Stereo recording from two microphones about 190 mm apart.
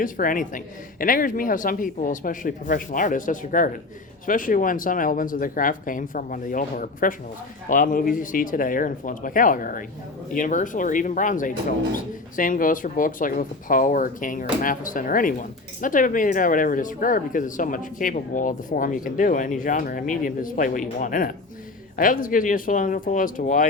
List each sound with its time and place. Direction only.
0.0 s speech: 45° left (ahead or behind)